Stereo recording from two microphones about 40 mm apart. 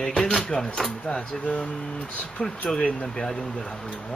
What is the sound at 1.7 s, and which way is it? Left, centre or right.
Speech, centre.